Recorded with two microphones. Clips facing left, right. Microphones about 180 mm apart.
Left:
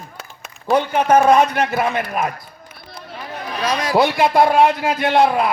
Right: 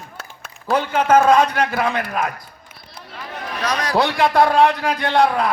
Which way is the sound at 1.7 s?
20° left (ahead or behind).